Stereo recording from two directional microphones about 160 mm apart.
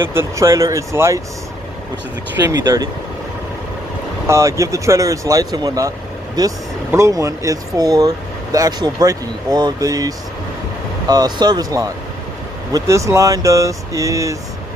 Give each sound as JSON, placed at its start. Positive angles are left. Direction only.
{"t": 0.0, "sound": "speech", "side_deg": -15}
{"t": 2.4, "sound": "speech", "side_deg": -20}
{"t": 4.3, "sound": "speech", "side_deg": -20}